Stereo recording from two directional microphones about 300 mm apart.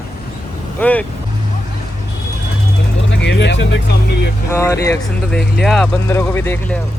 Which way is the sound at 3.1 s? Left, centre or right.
Left.